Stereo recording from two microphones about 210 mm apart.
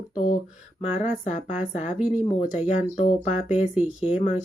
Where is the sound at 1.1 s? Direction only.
40° left (ahead or behind).